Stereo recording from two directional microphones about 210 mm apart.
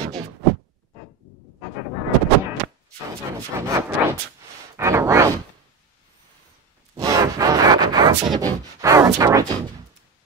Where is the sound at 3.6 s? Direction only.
10° right (ahead or behind).